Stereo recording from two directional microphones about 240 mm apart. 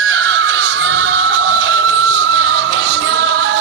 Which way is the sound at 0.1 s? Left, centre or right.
Right.